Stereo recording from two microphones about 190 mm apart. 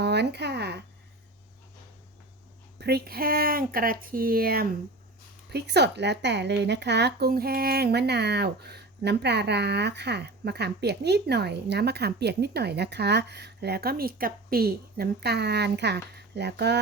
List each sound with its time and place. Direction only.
0.0 s speech: 60° right (ahead or behind)
2.7 s a woman's voice: 55° right (ahead or behind)